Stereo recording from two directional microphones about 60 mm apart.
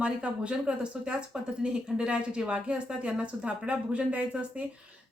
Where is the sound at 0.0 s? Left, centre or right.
Centre.